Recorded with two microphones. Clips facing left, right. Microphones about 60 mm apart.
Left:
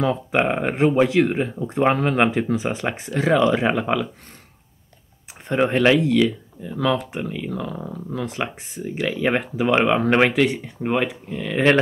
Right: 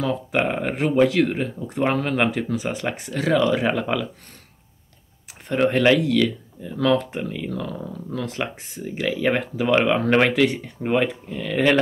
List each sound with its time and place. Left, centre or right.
0.0 s speech: left
5.5 s speech: centre
8.8 s speech: centre
9.3 s speech: centre